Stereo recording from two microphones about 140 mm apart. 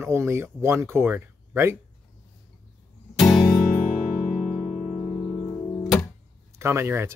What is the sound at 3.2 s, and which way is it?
Music, 25° left (ahead or behind).